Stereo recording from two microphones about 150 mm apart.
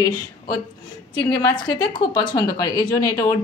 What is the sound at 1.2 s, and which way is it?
A woman's voice, 30° left (ahead or behind).